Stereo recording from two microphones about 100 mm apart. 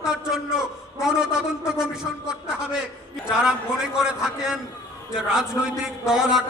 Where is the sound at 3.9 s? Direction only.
5° right (ahead or behind).